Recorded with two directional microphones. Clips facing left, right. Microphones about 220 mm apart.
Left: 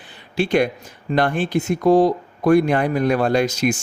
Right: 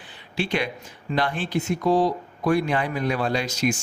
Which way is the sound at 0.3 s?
45° left (ahead or behind).